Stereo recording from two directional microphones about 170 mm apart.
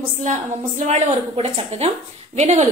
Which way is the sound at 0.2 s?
45° right (ahead or behind).